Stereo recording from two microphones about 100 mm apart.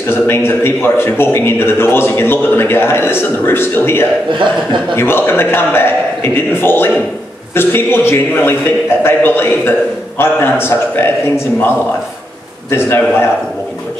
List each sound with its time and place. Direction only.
0.0 s a man's voice: 25° left (ahead or behind)